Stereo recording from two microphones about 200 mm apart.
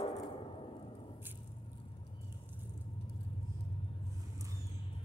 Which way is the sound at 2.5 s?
25° left (ahead or behind).